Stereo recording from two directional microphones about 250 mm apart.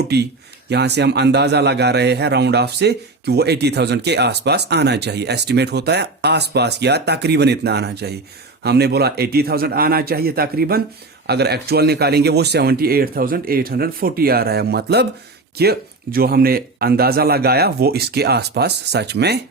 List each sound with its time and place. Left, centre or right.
0.7 s a man's voice: right